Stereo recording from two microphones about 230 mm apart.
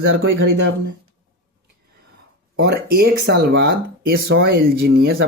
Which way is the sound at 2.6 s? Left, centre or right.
Right.